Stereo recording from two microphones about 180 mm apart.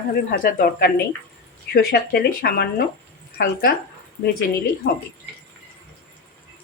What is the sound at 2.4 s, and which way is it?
Speech, 60° left (ahead or behind).